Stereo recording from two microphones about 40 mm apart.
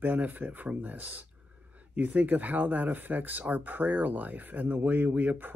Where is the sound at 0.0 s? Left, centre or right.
Right.